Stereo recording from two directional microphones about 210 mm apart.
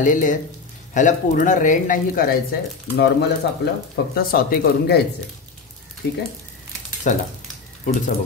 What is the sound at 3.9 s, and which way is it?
Speech, 45° left (ahead or behind).